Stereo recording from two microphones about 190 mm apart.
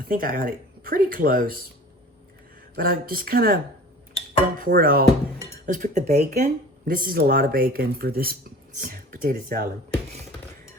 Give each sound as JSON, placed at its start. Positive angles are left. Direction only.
{"t": 0.1, "sound": "speech", "side_deg": -50}
{"t": 2.7, "sound": "speech", "side_deg": -50}